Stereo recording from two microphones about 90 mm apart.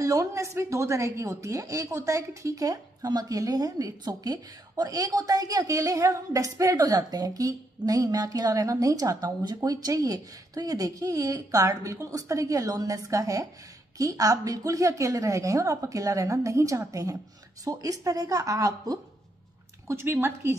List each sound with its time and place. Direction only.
0.0 s a woman's voice: 35° right (ahead or behind)
19.9 s a woman's voice: 30° right (ahead or behind)